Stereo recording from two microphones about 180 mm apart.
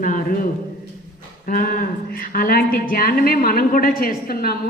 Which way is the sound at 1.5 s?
55° left (ahead or behind).